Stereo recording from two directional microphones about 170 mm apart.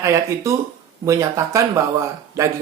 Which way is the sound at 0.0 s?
20° right (ahead or behind).